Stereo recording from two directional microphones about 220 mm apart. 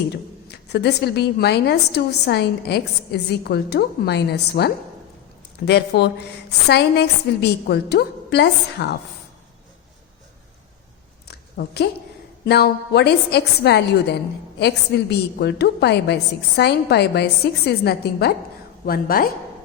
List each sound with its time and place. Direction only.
0.4 s a woman's voice: 50° left (ahead or behind)
11.3 s a sound: 45° left (ahead or behind)
12.5 s a woman's voice: 50° left (ahead or behind)